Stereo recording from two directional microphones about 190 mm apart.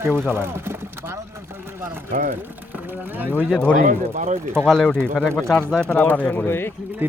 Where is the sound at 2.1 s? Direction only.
45° right (ahead or behind).